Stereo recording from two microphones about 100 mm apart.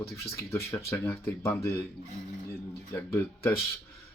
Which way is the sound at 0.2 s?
30° left (ahead or behind).